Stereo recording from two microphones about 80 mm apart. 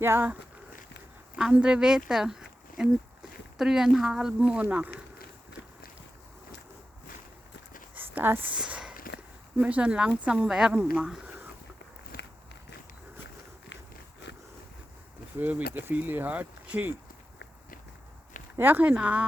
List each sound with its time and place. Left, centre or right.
0.0 s speech: right
1.5 s speech: centre
2.0 s a sound: centre
3.6 s speech: centre
7.9 s a sound: right
8.5 s a sound: centre
9.6 s speech: centre
15.4 s speech: right
18.6 s speech: right